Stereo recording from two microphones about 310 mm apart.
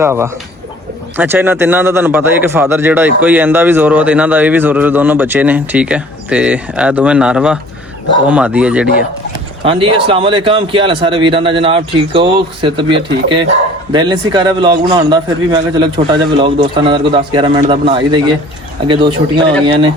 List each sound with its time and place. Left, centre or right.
0.0 s a man's voice: centre
9.6 s a man's voice: centre